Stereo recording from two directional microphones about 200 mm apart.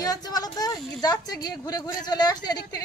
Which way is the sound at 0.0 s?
20° left (ahead or behind).